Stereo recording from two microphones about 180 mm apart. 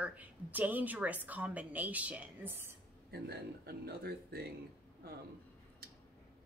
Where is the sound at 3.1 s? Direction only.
60° right (ahead or behind).